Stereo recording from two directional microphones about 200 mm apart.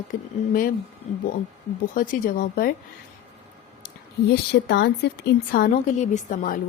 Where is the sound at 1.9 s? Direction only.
45° left (ahead or behind).